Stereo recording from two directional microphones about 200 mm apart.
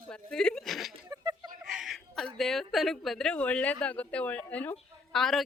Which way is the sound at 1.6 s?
Centre (ahead or behind).